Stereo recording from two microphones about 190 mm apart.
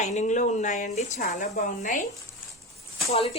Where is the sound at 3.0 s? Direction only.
30° left (ahead or behind).